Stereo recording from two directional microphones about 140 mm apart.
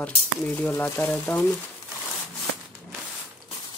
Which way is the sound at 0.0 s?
10° left (ahead or behind).